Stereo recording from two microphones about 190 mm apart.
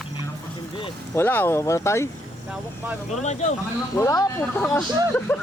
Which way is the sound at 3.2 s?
35° left (ahead or behind).